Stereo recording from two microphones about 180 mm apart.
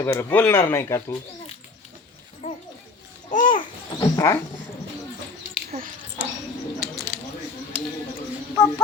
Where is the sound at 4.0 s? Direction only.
15° left (ahead or behind).